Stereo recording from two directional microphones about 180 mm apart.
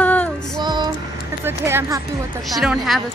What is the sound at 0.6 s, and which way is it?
Speech, 25° right (ahead or behind).